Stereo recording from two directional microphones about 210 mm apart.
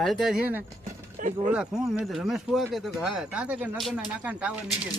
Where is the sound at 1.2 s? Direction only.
30° right (ahead or behind).